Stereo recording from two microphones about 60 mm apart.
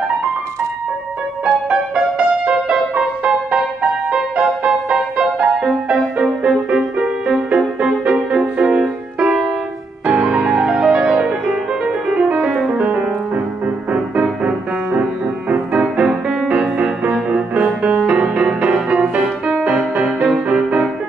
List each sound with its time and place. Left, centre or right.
1.4 s music: centre
10.0 s music: right
20.4 s music: right